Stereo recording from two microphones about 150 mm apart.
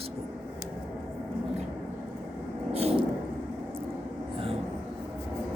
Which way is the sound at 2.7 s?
40° right (ahead or behind).